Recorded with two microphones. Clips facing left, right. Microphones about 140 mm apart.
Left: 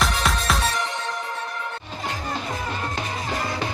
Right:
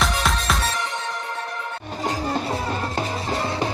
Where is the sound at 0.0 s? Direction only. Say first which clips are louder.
Right 1 dB; centre (ahead or behind).